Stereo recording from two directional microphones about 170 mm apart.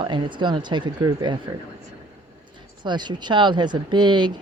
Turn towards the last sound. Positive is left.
turn(degrees=-25)  # may be behind; listen again after turning